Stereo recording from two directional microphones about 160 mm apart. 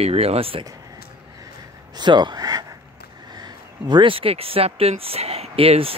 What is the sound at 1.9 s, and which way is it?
Speech, 30° right (ahead or behind).